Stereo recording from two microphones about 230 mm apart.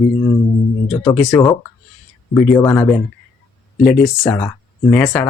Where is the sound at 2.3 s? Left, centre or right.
Centre.